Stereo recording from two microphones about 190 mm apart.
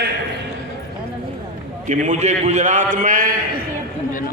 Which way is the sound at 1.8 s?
40° right (ahead or behind).